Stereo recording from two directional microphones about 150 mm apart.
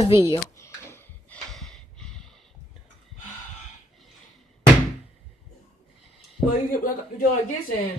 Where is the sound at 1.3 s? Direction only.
5° left (ahead or behind).